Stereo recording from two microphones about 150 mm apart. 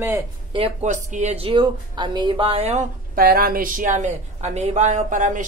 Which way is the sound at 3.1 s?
75° right (ahead or behind).